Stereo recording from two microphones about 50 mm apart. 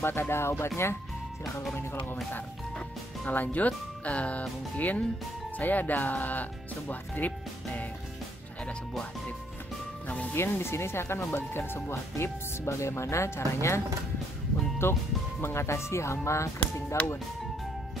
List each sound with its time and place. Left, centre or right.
0.0 s speech: left
3.3 s speech: left
10.0 s speech: left
10.3 s speech: left
11.5 s speech: left
11.9 s speech: left
14.8 s speech: left
15.4 s speech: left
16.5 s speech: left